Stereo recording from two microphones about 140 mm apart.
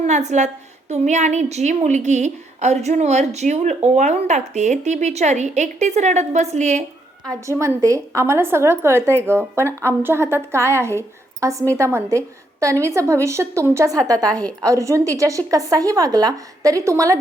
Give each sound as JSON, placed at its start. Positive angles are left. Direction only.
{"t": 0.0, "sound": "speech", "side_deg": -55}
{"t": 7.3, "sound": "a woman's voice", "side_deg": -20}